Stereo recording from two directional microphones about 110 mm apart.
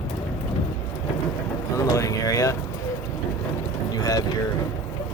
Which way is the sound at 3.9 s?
35° left (ahead or behind).